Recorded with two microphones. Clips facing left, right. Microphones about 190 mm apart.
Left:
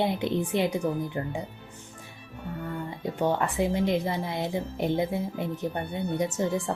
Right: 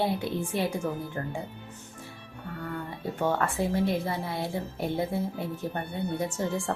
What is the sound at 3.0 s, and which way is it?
Speech, 15° left (ahead or behind).